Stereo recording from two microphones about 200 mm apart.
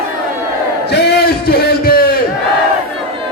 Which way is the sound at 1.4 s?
50° left (ahead or behind).